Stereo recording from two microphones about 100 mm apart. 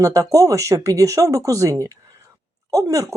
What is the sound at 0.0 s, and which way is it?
Speech, 35° right (ahead or behind).